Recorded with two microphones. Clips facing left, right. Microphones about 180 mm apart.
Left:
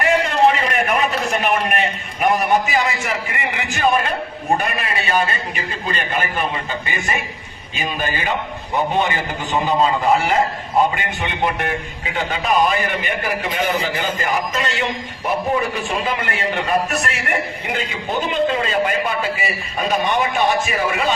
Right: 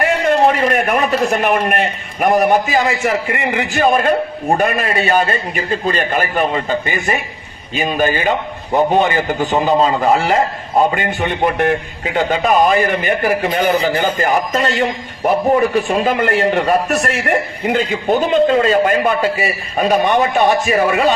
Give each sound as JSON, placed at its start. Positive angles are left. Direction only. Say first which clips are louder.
{"t": 0.0, "sound": "a man's voice", "louder": "right 2 dB", "side_deg": -50}
{"t": 9.6, "sound": "a man's voice", "louder": "right 2 dB", "side_deg": -45}